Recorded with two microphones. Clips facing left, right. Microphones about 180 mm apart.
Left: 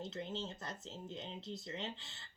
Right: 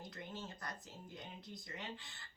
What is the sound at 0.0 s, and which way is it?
A woman's voice, 25° left (ahead or behind).